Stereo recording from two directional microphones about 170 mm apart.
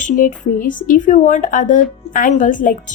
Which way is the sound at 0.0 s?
50° left (ahead or behind).